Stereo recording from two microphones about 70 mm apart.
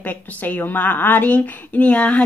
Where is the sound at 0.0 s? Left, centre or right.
Left.